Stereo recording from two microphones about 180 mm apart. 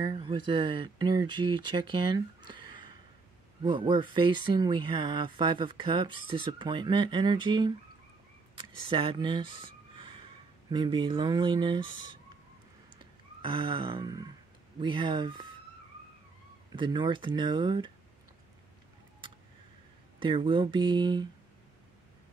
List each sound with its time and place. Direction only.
0.0 s speech: 25° right (ahead or behind)
13.4 s speech: 25° right (ahead or behind)
16.7 s speech: 25° right (ahead or behind)
20.2 s speech: 25° right (ahead or behind)